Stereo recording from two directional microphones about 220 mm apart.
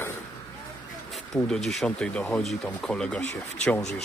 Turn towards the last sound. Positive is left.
turn(degrees=5)  # may be behind; listen again after turning